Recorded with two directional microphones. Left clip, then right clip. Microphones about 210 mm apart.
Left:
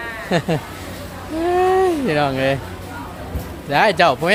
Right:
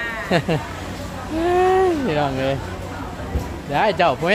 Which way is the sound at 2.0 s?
25° left (ahead or behind).